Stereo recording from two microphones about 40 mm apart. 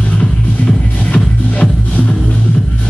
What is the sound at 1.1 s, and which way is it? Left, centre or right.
Music, left.